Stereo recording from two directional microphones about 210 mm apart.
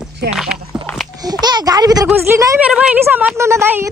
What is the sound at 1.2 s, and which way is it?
A woman's voice, 20° right (ahead or behind).